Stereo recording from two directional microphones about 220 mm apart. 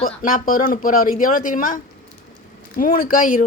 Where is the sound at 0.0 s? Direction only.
40° left (ahead or behind).